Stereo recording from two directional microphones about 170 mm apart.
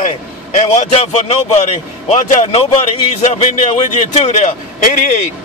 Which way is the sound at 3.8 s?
40° left (ahead or behind).